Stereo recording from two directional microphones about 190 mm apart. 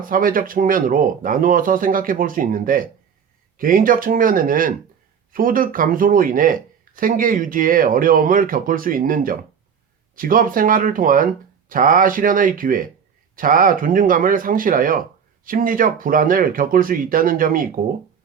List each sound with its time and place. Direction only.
0.0 s speech: 45° right (ahead or behind)